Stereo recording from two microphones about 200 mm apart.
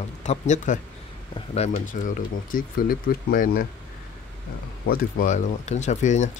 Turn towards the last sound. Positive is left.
turn(degrees=35)  # may be behind; listen again after turning